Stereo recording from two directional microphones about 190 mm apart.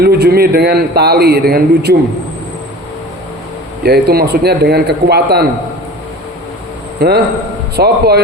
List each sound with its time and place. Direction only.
0.0 s a man's voice: 55° right (ahead or behind)
3.8 s a man's voice: 55° right (ahead or behind)
7.0 s a man's voice: 55° right (ahead or behind)